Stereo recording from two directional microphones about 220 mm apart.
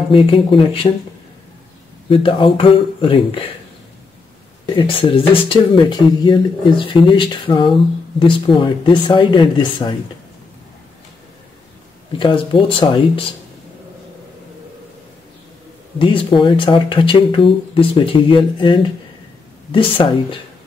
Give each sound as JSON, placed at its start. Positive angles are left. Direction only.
{"t": 0.1, "sound": "speech", "side_deg": 25}
{"t": 2.0, "sound": "speech", "side_deg": 25}
{"t": 4.7, "sound": "speech", "side_deg": 25}
{"t": 12.2, "sound": "speech", "side_deg": 20}
{"t": 16.0, "sound": "speech", "side_deg": 25}